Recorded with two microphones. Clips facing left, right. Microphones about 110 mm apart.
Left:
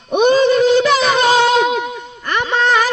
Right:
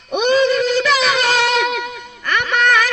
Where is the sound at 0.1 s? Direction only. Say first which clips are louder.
Left 3 dB; 35° left (ahead or behind).